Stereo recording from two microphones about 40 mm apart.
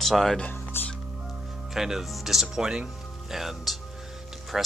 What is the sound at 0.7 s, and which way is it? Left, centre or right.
Speech, left.